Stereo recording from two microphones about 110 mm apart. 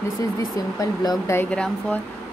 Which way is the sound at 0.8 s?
35° left (ahead or behind).